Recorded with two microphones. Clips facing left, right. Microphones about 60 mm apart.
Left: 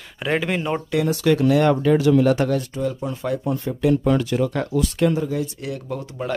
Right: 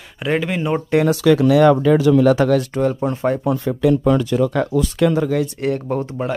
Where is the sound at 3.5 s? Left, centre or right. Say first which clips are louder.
Right 3 dB; right.